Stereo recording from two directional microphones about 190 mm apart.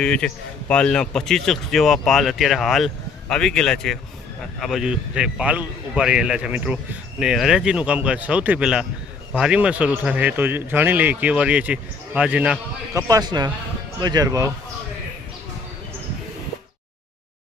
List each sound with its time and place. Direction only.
0.0 s a man's voice: 5° left (ahead or behind); by 14.5 s 15° right (ahead or behind)